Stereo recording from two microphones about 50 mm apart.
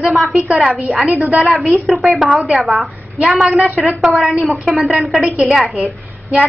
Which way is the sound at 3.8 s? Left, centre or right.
Centre.